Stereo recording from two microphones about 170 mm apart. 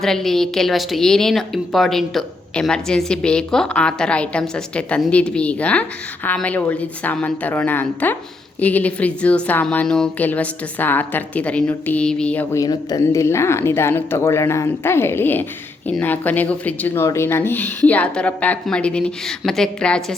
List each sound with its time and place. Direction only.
0.0 s a woman's voice: centre (ahead or behind)
12.5 s speech: 20° left (ahead or behind); by 20.1 s 5° left (ahead or behind)